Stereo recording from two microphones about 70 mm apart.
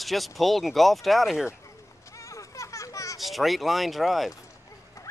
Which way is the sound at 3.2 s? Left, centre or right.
Centre.